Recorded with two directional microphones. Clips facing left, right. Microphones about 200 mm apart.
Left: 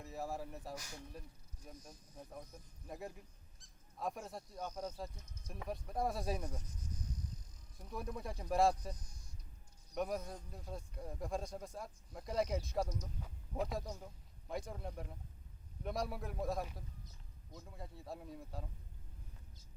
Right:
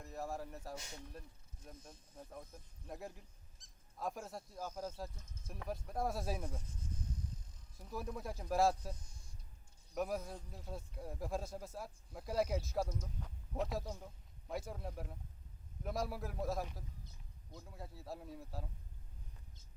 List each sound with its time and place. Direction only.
0.0 s speech: centre (ahead or behind)
2.1 s a man's voice: centre (ahead or behind)
3.6 s a sound: 20° right (ahead or behind)
3.9 s a man's voice: centre (ahead or behind)
7.8 s a man's voice: centre (ahead or behind)